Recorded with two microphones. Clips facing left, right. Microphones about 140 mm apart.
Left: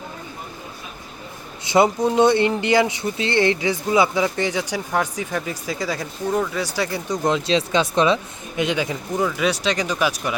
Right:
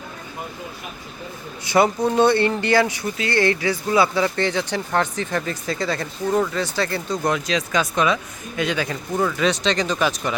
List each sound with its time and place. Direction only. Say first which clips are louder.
1.6 s speech: left 1 dB; 20° left (ahead or behind)